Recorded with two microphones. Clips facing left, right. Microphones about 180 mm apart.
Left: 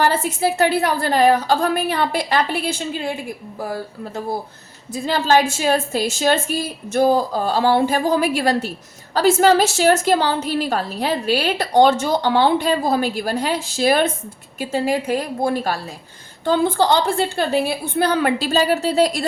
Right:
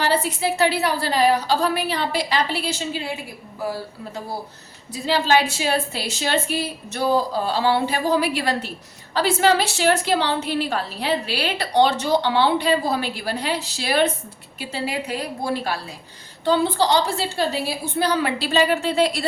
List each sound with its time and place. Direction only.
0.0 s a woman's voice: 50° left (ahead or behind)
5.0 s a woman's voice: 45° left (ahead or behind)